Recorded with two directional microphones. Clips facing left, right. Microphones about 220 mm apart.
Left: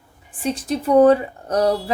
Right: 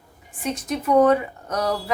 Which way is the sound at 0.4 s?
30° left (ahead or behind).